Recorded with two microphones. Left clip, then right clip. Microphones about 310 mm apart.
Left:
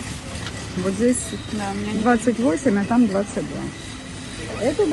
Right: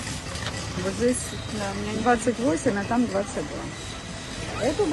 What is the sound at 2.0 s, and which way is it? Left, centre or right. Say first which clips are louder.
Speech: left 3 dB; centre.